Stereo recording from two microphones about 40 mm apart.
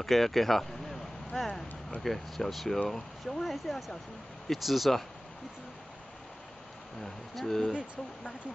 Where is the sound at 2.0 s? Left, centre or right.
Centre.